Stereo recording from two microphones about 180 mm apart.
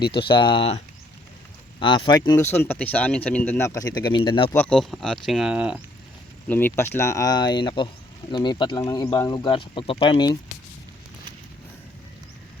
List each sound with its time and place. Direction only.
0.1 s speech: 25° left (ahead or behind)
1.8 s speech: 30° left (ahead or behind)
4.5 s speech: 5° left (ahead or behind)
6.5 s speech: 10° left (ahead or behind); by 10.3 s 25° left (ahead or behind)